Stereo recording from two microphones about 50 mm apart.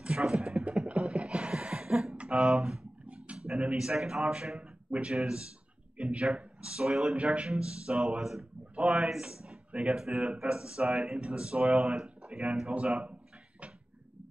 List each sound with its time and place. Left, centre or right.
0.0 s music: centre
0.8 s beatboxing: centre
2.1 s a sound: right
2.4 s speech: centre
10.9 s speech: centre
11.1 s speech: centre